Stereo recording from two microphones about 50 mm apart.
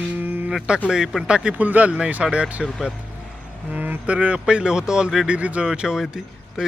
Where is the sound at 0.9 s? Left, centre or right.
Centre.